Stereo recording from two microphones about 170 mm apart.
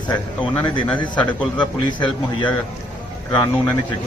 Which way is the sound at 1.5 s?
25° left (ahead or behind).